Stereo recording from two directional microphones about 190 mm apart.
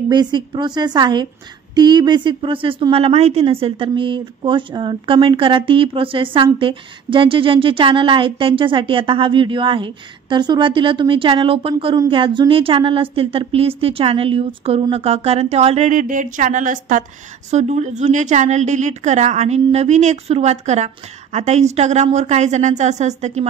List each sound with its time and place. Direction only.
0.1 s a woman's voice: 25° right (ahead or behind)